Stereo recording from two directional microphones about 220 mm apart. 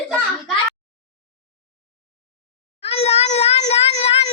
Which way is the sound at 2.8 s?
30° left (ahead or behind).